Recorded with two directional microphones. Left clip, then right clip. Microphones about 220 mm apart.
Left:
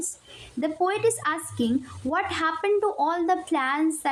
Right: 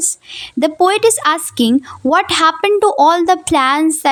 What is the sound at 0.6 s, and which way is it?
A woman's voice, 50° right (ahead or behind).